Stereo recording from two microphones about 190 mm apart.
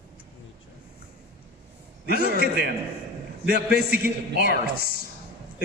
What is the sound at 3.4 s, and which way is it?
A man's voice, 60° right (ahead or behind).